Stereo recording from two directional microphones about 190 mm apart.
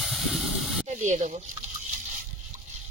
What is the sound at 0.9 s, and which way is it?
Speech, 40° right (ahead or behind).